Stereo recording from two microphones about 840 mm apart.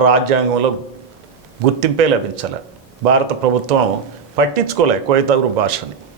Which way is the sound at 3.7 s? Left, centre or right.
Right.